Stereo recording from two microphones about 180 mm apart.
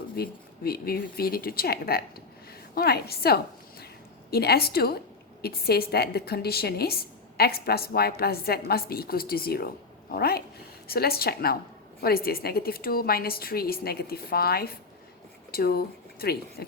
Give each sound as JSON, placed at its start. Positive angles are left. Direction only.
{"t": 0.2, "sound": "a woman's voice", "side_deg": 60}